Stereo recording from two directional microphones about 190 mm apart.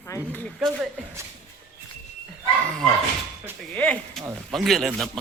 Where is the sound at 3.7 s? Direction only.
5° left (ahead or behind).